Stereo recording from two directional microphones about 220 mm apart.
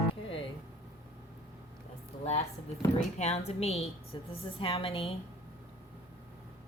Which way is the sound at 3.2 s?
30° left (ahead or behind).